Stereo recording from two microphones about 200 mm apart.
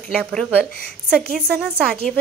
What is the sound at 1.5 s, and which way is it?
Speech, 50° right (ahead or behind).